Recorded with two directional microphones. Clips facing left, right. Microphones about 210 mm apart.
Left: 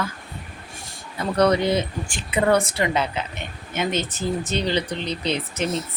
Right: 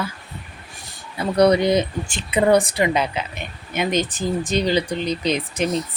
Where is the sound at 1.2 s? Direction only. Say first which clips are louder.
Right 3 dB; 10° right (ahead or behind).